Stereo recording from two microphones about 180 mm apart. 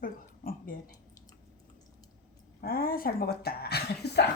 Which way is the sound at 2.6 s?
55° left (ahead or behind).